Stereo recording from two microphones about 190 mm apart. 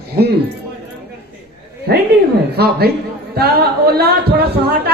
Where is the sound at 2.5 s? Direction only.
55° right (ahead or behind).